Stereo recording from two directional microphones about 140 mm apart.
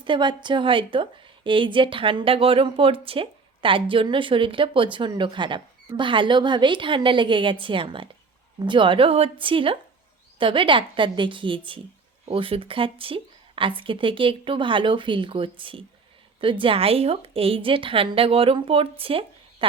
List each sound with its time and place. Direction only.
0.0 s a woman's voice: 35° right (ahead or behind)